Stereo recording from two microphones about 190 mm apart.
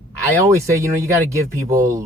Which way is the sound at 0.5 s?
15° right (ahead or behind).